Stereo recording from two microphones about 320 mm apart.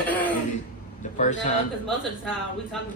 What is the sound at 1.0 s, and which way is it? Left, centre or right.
Speech, left.